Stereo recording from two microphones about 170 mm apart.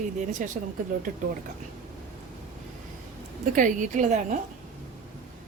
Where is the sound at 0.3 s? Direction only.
50° right (ahead or behind).